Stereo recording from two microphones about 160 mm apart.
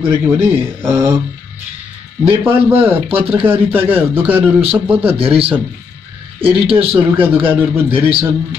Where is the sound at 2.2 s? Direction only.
10° right (ahead or behind).